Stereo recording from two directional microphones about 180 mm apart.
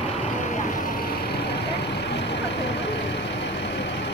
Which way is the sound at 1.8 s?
70° left (ahead or behind).